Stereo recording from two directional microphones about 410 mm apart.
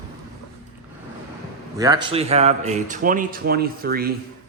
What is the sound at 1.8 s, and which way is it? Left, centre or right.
Speech, centre.